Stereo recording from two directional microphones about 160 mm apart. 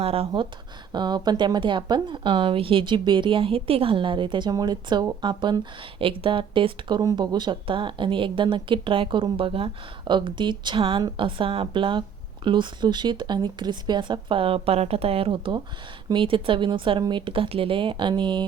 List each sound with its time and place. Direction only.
0.0 s speech: 40° right (ahead or behind)
0.9 s speech: 25° right (ahead or behind)